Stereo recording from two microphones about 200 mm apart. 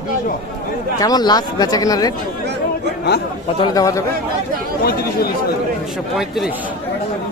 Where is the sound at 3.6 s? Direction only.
15° left (ahead or behind).